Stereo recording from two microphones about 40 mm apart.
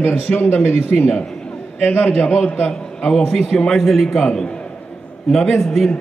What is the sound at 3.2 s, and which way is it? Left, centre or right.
A man's voice, centre.